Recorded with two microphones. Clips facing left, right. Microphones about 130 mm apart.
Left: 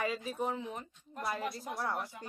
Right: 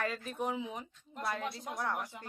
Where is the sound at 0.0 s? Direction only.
10° left (ahead or behind).